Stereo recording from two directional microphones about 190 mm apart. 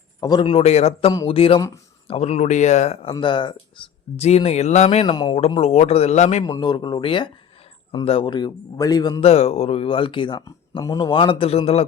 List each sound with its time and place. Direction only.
0.2 s a man's voice: 20° left (ahead or behind)
6.4 s a man's voice: 20° left (ahead or behind)